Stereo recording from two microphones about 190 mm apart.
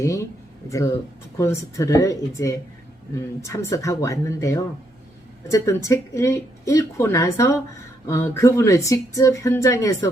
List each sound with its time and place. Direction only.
0.0 s speech: 15° left (ahead or behind)
1.4 s speech: 15° left (ahead or behind)